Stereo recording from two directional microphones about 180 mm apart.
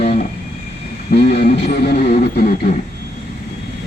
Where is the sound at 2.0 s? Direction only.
50° left (ahead or behind).